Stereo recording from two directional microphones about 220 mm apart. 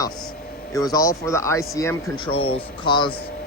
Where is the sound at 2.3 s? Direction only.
25° left (ahead or behind).